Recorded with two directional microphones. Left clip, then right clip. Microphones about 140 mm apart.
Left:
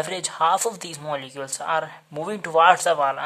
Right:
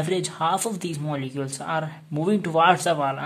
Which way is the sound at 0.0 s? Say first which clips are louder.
Left 2 dB; 35° left (ahead or behind).